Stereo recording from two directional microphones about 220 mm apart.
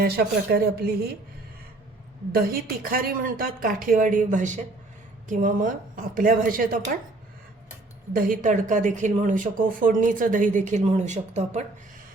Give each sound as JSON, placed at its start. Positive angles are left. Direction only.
{"t": 0.0, "sound": "a woman's voice", "side_deg": -45}
{"t": 2.3, "sound": "speech", "side_deg": -40}
{"t": 8.1, "sound": "speech", "side_deg": -40}